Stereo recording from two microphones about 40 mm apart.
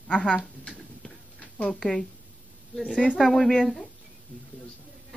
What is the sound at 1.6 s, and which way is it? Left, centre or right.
Speech, left.